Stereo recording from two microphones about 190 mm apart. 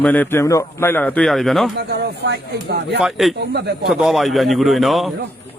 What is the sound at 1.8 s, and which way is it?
Speech, 60° right (ahead or behind).